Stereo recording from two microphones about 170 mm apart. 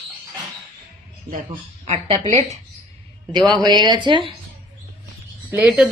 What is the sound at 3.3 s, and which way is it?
Speech, 25° right (ahead or behind).